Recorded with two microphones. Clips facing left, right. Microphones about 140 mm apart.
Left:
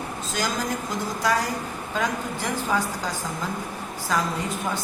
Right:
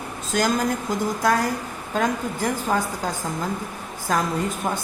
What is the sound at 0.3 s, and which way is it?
A woman's voice, 50° right (ahead or behind).